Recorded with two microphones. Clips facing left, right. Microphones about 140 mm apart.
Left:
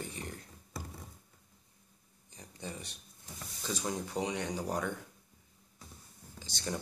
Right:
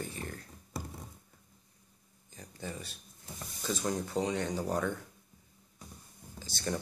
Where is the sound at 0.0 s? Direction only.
20° left (ahead or behind).